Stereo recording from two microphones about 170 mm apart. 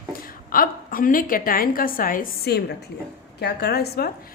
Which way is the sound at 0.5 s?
55° left (ahead or behind).